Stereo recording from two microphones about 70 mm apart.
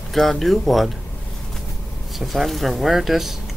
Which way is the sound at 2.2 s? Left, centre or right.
Centre.